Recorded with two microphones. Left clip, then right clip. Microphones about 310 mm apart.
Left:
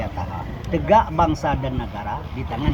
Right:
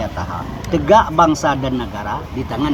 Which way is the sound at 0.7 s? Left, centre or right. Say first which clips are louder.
Right 5 dB; right.